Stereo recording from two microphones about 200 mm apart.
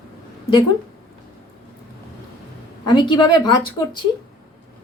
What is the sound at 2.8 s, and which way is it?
Speech, 20° left (ahead or behind).